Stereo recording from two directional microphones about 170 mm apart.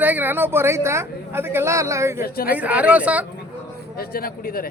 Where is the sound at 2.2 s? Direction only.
60° left (ahead or behind).